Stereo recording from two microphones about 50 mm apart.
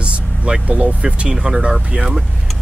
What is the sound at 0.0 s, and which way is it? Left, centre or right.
Vehicle, right.